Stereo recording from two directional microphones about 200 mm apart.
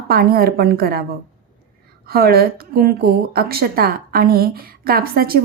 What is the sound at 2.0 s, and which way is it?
A woman's voice, 50° right (ahead or behind).